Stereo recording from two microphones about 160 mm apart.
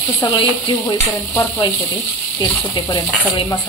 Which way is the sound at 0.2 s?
25° left (ahead or behind).